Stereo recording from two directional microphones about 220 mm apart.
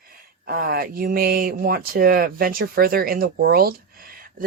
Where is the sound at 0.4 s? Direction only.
40° right (ahead or behind).